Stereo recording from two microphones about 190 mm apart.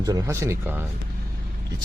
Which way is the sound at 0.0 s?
20° right (ahead or behind).